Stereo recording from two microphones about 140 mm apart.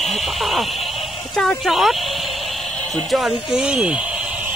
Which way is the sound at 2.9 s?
Centre (ahead or behind).